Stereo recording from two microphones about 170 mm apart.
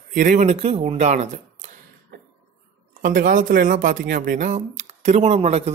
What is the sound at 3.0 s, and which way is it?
Speech, 55° right (ahead or behind).